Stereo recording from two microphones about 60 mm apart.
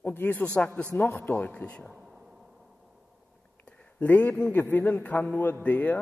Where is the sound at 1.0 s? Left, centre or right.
Left.